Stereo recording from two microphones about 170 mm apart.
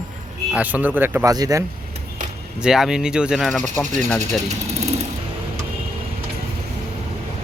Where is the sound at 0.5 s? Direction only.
10° right (ahead or behind).